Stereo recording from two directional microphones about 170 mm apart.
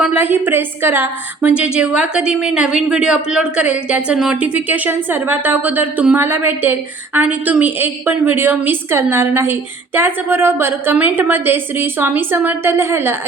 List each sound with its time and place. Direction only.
0.0 s a woman's voice: 10° right (ahead or behind)